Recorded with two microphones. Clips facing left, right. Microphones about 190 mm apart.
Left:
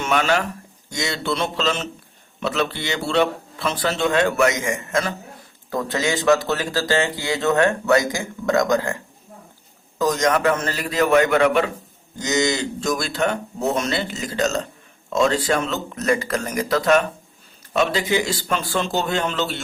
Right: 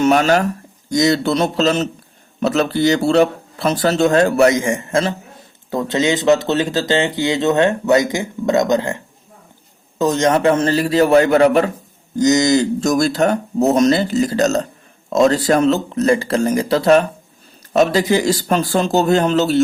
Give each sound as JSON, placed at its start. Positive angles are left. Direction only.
{"t": 0.0, "sound": "speech", "side_deg": -40}
{"t": 10.0, "sound": "speech", "side_deg": -25}